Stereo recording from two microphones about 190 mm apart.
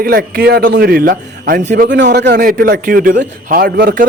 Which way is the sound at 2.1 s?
55° right (ahead or behind).